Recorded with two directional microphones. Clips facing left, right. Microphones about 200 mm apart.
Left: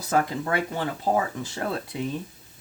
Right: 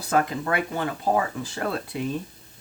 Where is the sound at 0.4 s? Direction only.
25° left (ahead or behind).